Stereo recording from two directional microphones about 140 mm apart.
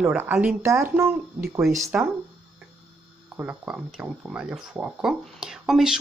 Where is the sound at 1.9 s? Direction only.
10° right (ahead or behind).